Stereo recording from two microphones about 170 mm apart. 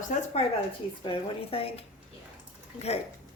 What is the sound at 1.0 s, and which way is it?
Speech, 35° left (ahead or behind).